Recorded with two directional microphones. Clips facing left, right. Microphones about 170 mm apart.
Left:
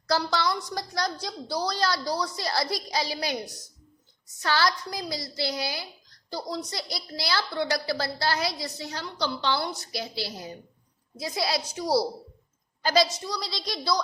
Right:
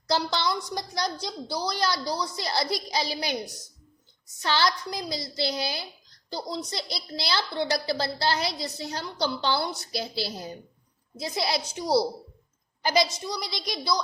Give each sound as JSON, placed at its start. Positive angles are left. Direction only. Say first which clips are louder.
{"t": 0.1, "sound": "a woman's voice", "louder": "even", "side_deg": -20}
{"t": 4.4, "sound": "a woman's voice", "louder": "even", "side_deg": -20}